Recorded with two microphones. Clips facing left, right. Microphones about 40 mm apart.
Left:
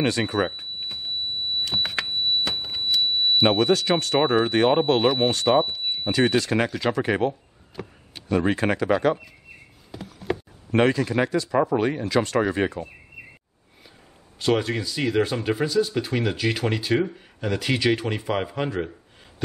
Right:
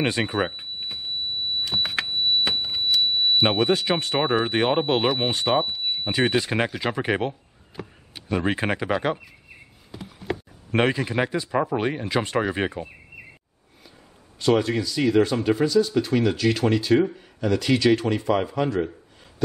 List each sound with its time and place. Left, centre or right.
0.0 s speech: right
1.6 s power windows: centre
2.6 s a sound: centre
3.5 s speech: centre
4.2 s speech: centre
4.5 s speech: centre
5.6 s a sound: centre
6.0 s speech: centre
7.7 s a sound: centre
8.4 s speech: centre
9.9 s a sound: centre
10.7 s speech: centre
14.4 s speech: centre